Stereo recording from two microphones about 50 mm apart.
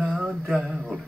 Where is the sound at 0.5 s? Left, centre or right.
Centre.